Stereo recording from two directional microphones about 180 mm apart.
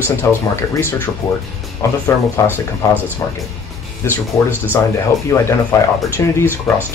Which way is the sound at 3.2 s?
15° left (ahead or behind).